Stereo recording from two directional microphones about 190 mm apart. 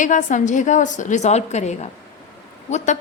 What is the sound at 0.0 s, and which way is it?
A woman's voice, 40° left (ahead or behind).